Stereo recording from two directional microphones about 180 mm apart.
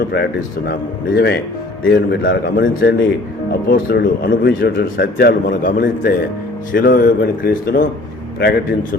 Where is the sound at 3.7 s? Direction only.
55° left (ahead or behind).